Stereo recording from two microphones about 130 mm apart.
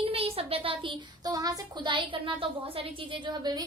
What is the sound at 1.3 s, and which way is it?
A woman's voice, 30° right (ahead or behind).